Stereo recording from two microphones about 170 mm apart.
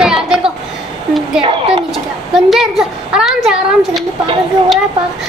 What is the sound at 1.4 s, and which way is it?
Speech, 30° right (ahead or behind).